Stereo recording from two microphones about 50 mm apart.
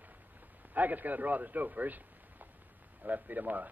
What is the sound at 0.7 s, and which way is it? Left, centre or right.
A man's voice, right.